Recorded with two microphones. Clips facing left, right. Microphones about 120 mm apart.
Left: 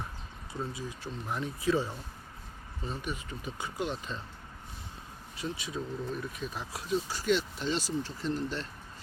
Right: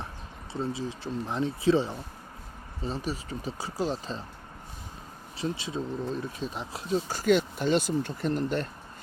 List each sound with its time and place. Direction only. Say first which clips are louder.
0.7 s speech: right 7 dB; 30° right (ahead or behind)
5.4 s speech: right 5 dB; 25° right (ahead or behind)
7.1 s speech: right 9 dB; 45° right (ahead or behind)